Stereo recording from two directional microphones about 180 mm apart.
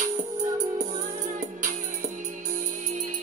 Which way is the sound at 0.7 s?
45° right (ahead or behind).